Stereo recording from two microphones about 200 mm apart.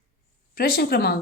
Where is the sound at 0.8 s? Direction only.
50° left (ahead or behind).